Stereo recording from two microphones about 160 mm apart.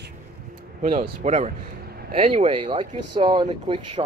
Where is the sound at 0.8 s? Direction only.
45° right (ahead or behind).